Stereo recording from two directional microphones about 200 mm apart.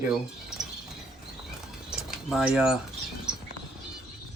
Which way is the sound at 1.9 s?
5° right (ahead or behind).